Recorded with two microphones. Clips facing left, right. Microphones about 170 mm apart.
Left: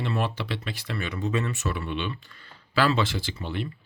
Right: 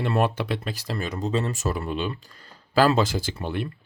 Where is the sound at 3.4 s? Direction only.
55° right (ahead or behind).